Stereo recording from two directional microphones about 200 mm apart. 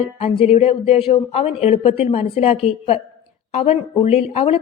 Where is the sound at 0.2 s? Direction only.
30° left (ahead or behind).